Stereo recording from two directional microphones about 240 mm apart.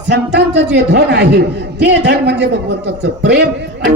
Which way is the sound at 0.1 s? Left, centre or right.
Right.